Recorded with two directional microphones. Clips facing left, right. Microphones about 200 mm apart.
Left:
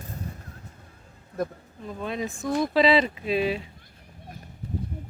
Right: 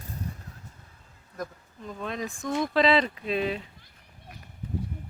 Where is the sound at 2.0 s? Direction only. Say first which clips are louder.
Left 3 dB; 5° left (ahead or behind).